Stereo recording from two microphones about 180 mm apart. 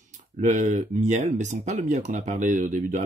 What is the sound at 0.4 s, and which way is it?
Speech, 45° right (ahead or behind).